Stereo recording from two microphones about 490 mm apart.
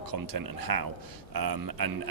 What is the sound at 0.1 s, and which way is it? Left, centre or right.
Speech, right.